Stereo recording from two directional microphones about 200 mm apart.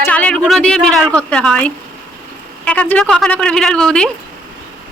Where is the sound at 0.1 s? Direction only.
5° left (ahead or behind).